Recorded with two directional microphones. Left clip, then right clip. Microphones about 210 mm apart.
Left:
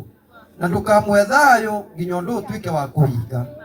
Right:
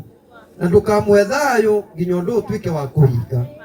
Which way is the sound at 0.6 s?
50° left (ahead or behind).